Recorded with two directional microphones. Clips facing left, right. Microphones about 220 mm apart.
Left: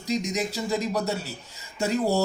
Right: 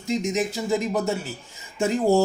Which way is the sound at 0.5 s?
25° right (ahead or behind).